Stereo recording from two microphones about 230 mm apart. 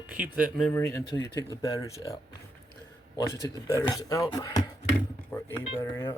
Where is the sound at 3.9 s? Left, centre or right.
Centre.